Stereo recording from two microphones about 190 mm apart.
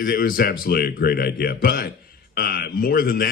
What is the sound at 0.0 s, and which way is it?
A man's voice, 50° left (ahead or behind).